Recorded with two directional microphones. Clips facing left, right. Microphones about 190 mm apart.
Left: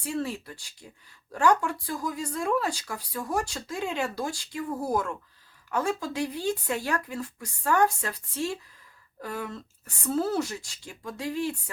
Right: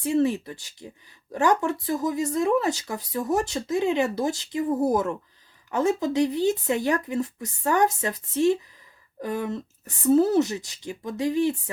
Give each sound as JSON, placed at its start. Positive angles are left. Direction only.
{"t": 0.0, "sound": "speech", "side_deg": -20}